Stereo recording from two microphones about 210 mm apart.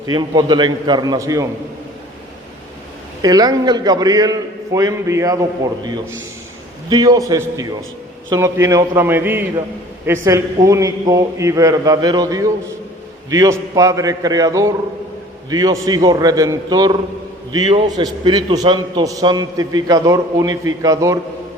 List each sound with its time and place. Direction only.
0.0 s a man's voice: 20° right (ahead or behind)
3.2 s a man's voice: 20° right (ahead or behind)